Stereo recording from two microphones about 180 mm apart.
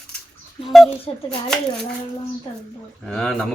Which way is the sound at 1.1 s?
35° left (ahead or behind).